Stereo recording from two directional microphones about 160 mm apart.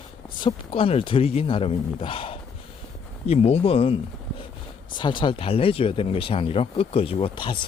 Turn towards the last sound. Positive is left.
turn(degrees=30)  # may be behind; listen again after turning